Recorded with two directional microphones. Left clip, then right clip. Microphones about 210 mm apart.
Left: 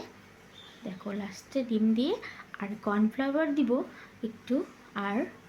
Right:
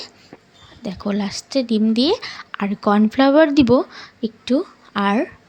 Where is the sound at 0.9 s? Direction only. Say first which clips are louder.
Right 14 dB; 40° right (ahead or behind).